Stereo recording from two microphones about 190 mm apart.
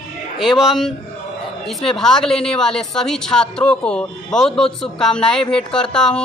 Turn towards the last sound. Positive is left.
turn(degrees=5)  # may be behind; listen again after turning